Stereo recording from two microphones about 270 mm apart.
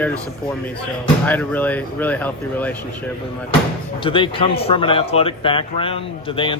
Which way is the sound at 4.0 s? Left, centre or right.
Centre.